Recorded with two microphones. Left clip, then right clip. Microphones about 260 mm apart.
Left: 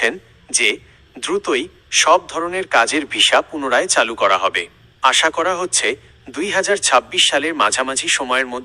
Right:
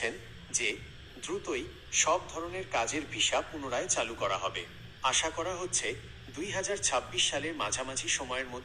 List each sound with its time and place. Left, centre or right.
0.5 s speech: left